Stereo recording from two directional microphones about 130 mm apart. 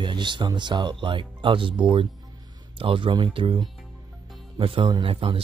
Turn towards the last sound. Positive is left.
turn(degrees=-45)  # may be behind; listen again after turning